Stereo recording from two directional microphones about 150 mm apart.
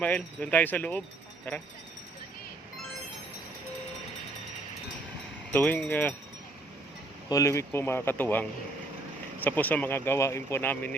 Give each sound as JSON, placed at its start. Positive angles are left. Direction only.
{"t": 0.0, "sound": "speech", "side_deg": 10}
{"t": 5.5, "sound": "speech", "side_deg": 10}
{"t": 7.3, "sound": "speech", "side_deg": 20}